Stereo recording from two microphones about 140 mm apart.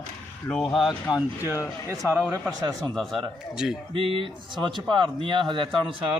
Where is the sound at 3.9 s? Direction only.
40° right (ahead or behind).